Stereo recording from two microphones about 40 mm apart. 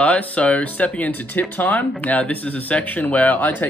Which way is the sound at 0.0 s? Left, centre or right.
Left.